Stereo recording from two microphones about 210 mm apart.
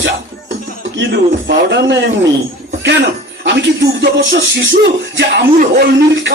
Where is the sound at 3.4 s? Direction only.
55° right (ahead or behind).